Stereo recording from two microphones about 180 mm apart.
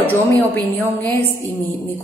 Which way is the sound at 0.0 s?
10° left (ahead or behind).